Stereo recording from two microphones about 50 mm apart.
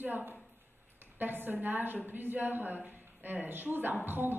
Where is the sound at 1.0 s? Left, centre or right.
Right.